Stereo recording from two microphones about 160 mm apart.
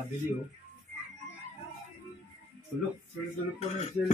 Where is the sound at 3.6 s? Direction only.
40° left (ahead or behind).